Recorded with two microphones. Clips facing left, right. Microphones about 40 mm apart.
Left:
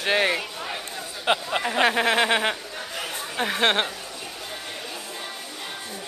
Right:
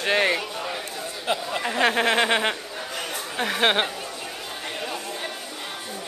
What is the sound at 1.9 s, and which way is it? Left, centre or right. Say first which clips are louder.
Speech: right 2 dB; centre.